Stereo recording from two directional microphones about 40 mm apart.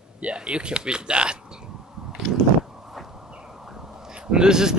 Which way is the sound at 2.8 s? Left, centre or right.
Centre.